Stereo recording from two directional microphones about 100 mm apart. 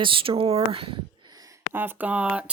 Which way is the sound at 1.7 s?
20° right (ahead or behind).